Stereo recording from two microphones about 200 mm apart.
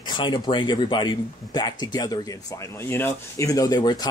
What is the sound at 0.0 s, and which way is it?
Speech, 20° left (ahead or behind).